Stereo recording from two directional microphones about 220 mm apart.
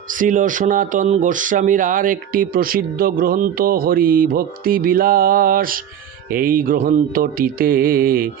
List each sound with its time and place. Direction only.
0.1 s speech: 35° right (ahead or behind)